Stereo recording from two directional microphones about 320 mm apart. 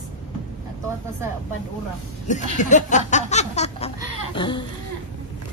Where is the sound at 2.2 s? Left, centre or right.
Left.